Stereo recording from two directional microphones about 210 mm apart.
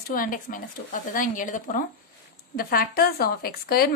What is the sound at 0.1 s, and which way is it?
Speech, 40° left (ahead or behind).